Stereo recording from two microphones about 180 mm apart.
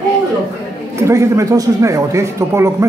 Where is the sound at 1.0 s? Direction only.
15° right (ahead or behind).